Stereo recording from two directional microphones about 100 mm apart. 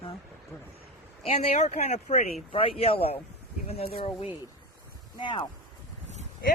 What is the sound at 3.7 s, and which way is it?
Speech, 90° left.